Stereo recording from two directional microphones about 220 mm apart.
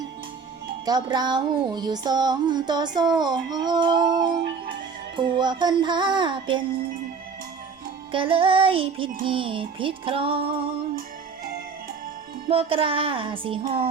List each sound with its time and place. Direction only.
0.9 s music: 20° right (ahead or behind)
8.1 s music: 25° right (ahead or behind)
12.5 s music: 25° right (ahead or behind)